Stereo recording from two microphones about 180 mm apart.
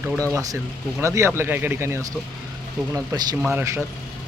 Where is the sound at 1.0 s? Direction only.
15° right (ahead or behind).